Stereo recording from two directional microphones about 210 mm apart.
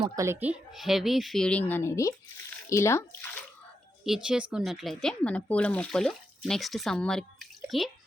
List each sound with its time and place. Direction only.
0.2 s a child's voice: 10° right (ahead or behind); by 3.4 s 10° left (ahead or behind)
4.0 s speech: 5° right (ahead or behind)